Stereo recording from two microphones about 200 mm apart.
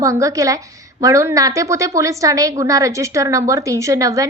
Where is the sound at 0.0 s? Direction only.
15° right (ahead or behind).